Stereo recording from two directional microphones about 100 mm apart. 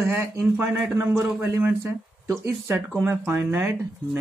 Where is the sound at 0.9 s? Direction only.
20° right (ahead or behind).